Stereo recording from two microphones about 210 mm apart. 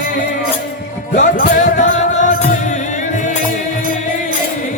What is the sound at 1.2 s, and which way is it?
Music, 40° left (ahead or behind).